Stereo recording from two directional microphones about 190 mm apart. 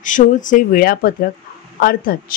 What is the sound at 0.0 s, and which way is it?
Speech, 45° left (ahead or behind).